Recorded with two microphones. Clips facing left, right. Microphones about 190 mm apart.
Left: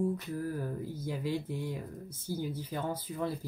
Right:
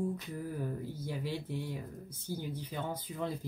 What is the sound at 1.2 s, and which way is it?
Speech, 45° left (ahead or behind).